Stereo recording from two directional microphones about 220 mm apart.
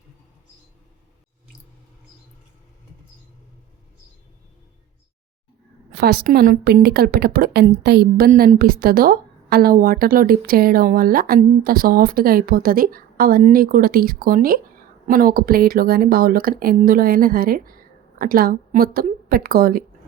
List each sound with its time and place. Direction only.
5.9 s a woman's voice: 45° right (ahead or behind)